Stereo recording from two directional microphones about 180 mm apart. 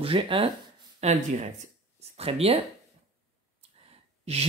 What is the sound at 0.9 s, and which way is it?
Speech, 40° right (ahead or behind).